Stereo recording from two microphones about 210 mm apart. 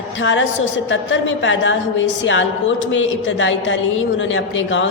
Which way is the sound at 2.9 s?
65° left (ahead or behind).